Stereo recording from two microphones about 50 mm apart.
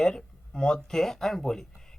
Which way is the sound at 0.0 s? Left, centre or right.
Centre.